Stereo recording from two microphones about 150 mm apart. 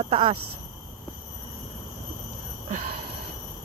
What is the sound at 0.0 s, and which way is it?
Speech, 35° right (ahead or behind).